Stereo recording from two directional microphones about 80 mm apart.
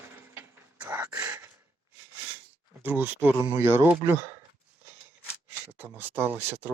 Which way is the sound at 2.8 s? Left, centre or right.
Right.